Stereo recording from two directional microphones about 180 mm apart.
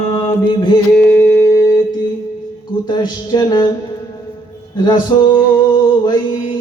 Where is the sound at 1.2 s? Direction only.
15° left (ahead or behind).